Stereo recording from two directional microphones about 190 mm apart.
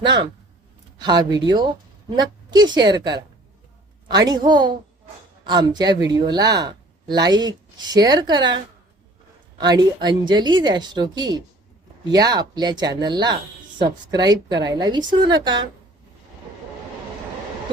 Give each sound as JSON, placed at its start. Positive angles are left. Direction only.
{"t": 0.0, "sound": "speech", "side_deg": -25}
{"t": 4.1, "sound": "speech", "side_deg": -20}